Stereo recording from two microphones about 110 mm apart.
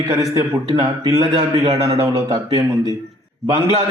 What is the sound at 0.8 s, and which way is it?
Speech, 45° right (ahead or behind).